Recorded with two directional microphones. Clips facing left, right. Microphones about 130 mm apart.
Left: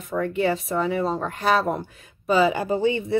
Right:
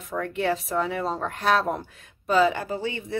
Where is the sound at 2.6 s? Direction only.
20° left (ahead or behind).